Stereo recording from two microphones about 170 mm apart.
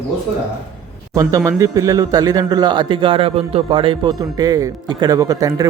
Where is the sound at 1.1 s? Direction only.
20° right (ahead or behind).